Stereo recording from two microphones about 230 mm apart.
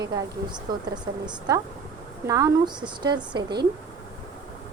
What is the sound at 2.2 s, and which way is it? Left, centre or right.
Speech, centre.